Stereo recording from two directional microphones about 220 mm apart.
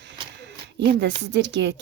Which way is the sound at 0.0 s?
55° right (ahead or behind).